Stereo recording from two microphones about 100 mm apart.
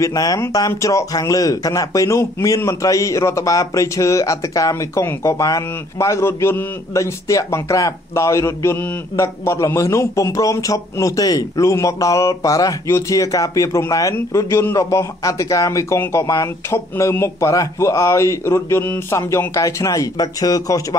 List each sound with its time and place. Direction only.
0.0 s a man's voice: 35° left (ahead or behind)